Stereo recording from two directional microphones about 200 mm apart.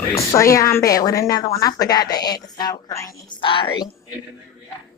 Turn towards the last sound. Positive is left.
turn(degrees=25)  # may be behind; listen again after turning